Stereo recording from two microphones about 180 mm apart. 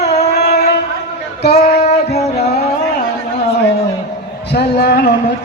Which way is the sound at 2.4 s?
40° left (ahead or behind).